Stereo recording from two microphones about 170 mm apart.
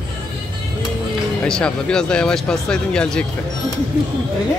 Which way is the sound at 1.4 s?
5° left (ahead or behind).